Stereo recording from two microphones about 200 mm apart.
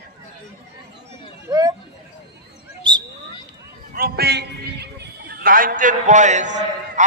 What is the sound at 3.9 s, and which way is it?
A man's voice, 50° right (ahead or behind).